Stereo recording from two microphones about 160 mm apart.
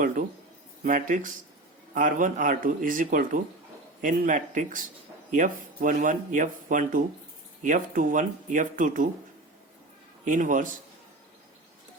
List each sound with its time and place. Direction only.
0.0 s speech: 55° right (ahead or behind)
10.2 s speech: 55° right (ahead or behind)